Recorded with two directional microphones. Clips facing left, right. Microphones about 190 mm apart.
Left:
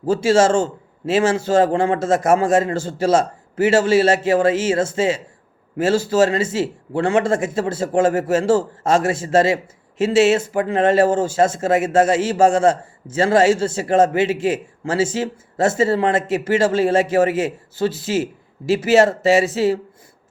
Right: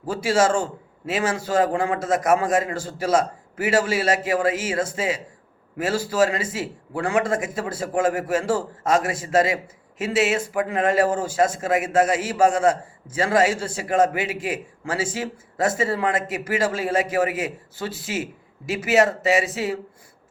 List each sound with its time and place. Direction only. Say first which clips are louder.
0.0 s speech: left 5 dB; 25° left (ahead or behind)